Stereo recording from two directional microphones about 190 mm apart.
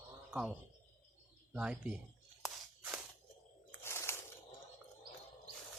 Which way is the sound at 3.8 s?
15° left (ahead or behind).